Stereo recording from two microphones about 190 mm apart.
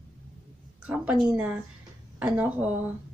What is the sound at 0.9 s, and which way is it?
Speech, 5° right (ahead or behind).